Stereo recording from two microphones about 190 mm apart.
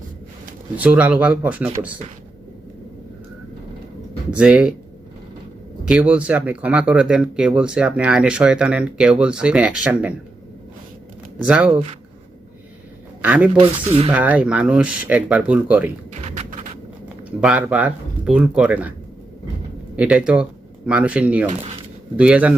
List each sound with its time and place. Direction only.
0.8 s speech: 5° right (ahead or behind)
4.3 s speech: 5° right (ahead or behind)
5.8 s speech: 5° right (ahead or behind)
11.4 s speech: 5° right (ahead or behind)
13.2 s speech: 10° right (ahead or behind)
13.6 s speech: 30° right (ahead or behind)
14.1 s speech: 10° right (ahead or behind)
16.1 s music: 35° right (ahead or behind)
17.4 s speech: 5° right (ahead or behind)
20.0 s speech: 5° right (ahead or behind)